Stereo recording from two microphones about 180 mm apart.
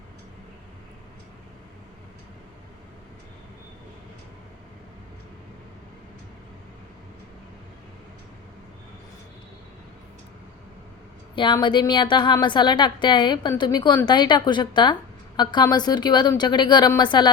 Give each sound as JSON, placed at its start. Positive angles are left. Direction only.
{"t": 11.3, "sound": "a woman's voice", "side_deg": 25}